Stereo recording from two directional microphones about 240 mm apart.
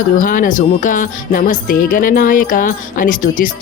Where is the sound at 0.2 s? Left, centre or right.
Left.